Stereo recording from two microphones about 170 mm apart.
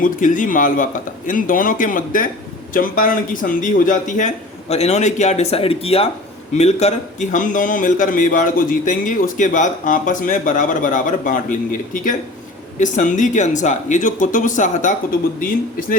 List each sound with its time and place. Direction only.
0.0 s a man's voice: 50° left (ahead or behind)